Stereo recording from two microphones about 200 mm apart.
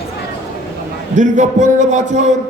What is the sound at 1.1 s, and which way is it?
A man's voice, 35° right (ahead or behind).